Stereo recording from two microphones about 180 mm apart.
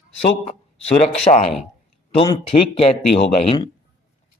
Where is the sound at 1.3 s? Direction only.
25° left (ahead or behind).